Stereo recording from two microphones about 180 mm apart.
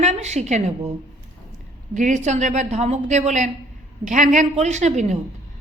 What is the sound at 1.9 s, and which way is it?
Speech, 40° right (ahead or behind).